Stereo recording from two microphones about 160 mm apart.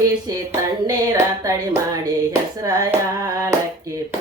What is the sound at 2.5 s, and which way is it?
Music, 20° right (ahead or behind).